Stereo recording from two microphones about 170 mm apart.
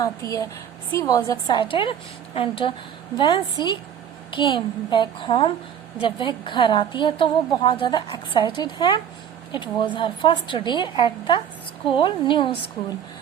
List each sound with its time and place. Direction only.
0.0 s a woman's voice: 20° left (ahead or behind)